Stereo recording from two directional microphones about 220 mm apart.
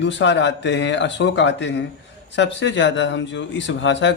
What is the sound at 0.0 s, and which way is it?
Speech, 55° left (ahead or behind).